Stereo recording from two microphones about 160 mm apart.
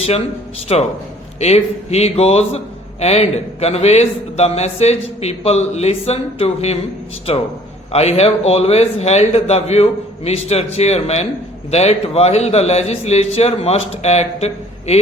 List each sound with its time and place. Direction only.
0.7 s a man's voice: 40° left (ahead or behind)
7.9 s a man's voice: 40° left (ahead or behind)